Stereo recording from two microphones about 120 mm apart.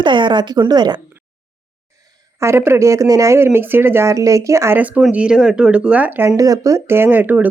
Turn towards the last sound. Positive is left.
turn(degrees=-15)  # may be behind; listen again after turning